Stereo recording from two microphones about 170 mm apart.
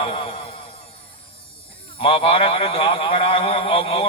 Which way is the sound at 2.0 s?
30° left (ahead or behind).